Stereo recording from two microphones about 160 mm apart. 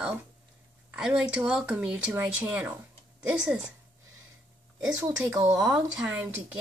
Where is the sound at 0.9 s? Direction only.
5° right (ahead or behind).